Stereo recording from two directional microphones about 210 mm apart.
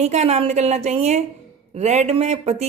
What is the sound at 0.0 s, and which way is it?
A woman's voice, 30° right (ahead or behind).